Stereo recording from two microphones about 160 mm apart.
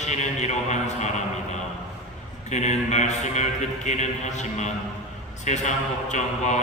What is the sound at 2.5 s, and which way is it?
Speech, 45° left (ahead or behind).